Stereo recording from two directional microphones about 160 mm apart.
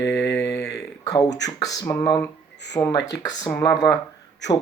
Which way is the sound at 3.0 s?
90° left.